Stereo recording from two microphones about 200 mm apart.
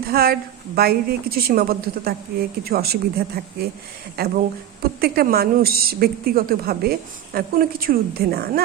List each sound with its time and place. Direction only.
0.0 s a woman's voice: 50° right (ahead or behind)